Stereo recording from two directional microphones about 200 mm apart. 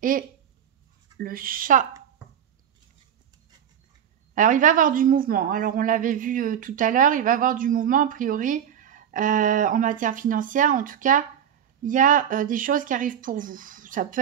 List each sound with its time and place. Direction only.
1.2 s speech: 45° right (ahead or behind)
4.4 s a woman's voice: 40° right (ahead or behind)